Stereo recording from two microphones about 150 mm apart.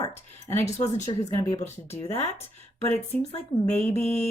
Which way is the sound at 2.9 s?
50° left (ahead or behind).